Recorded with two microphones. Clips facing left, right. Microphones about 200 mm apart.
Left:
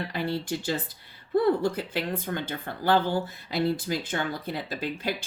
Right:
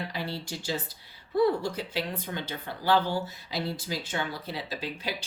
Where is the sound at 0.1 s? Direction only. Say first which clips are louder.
Left 6 dB; 50° left (ahead or behind).